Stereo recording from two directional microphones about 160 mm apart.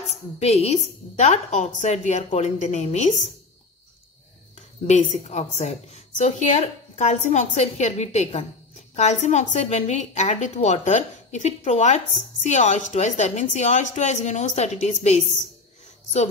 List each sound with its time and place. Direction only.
0.4 s a woman's voice: 40° left (ahead or behind)
4.6 s a woman's voice: 45° left (ahead or behind)